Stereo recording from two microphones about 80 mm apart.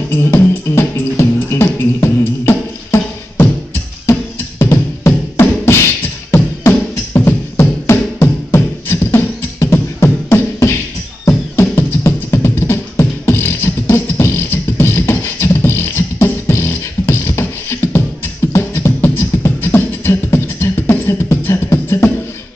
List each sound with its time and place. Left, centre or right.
0.1 s music: left
4.0 s beatboxing: left
7.2 s music: left
8.5 s beatboxing: left